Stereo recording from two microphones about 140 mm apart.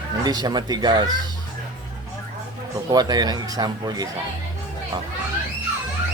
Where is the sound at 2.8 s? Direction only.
30° right (ahead or behind).